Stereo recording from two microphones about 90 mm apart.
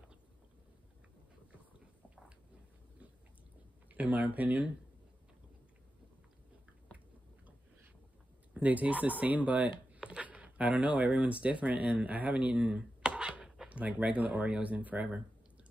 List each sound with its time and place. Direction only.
3.9 s speech: 15° right (ahead or behind)
8.5 s speech: 15° right (ahead or behind)